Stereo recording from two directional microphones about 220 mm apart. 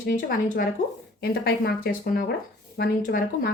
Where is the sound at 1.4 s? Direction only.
45° left (ahead or behind).